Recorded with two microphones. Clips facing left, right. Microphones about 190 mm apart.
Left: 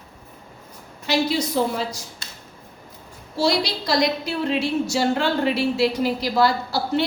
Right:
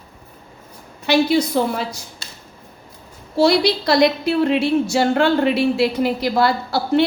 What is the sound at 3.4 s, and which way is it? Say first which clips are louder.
A woman's voice: right 6 dB; 60° right (ahead or behind).